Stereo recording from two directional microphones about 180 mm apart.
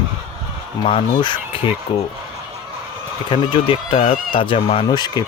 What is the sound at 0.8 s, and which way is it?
Speech, 30° left (ahead or behind).